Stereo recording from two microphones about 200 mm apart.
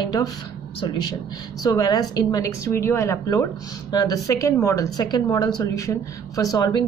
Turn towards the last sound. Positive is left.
turn(degrees=20)  # may be behind; listen again after turning